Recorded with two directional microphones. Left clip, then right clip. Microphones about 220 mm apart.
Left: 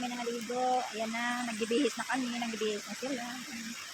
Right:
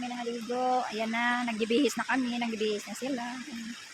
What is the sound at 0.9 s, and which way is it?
Speech, 45° right (ahead or behind).